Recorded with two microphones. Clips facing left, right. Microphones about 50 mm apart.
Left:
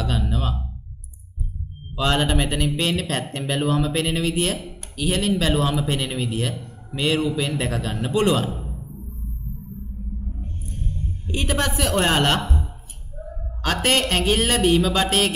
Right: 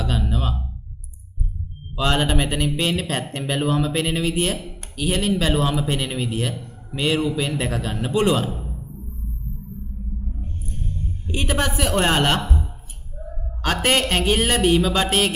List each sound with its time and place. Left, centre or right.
0.0 s a sound: centre
2.0 s a man's voice: centre
11.3 s a woman's voice: centre
13.6 s a man's voice: centre